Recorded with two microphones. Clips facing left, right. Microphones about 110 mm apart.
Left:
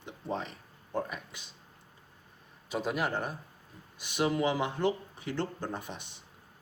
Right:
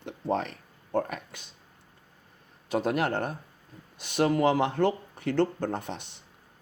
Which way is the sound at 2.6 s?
60° right (ahead or behind).